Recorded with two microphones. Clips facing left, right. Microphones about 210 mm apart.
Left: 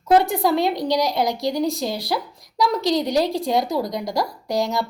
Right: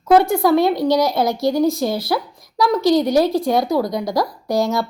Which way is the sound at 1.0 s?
15° left (ahead or behind).